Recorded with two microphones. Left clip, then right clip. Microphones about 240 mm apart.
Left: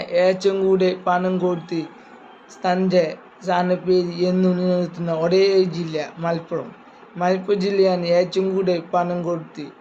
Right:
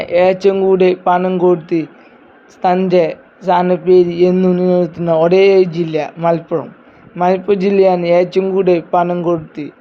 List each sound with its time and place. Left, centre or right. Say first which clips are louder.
0.0 s speech: right 7 dB; right